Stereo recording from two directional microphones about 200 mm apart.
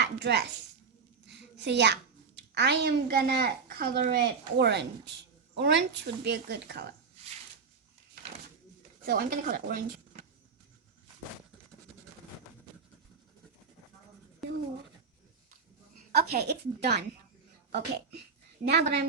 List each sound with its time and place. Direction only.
0.0 s a child's voice: 55° right (ahead or behind)
9.0 s speech: 45° right (ahead or behind)
14.4 s a sound: centre (ahead or behind)
16.1 s a woman's voice: 55° right (ahead or behind)